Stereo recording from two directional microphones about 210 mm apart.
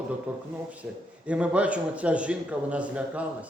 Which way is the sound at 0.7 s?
5° right (ahead or behind).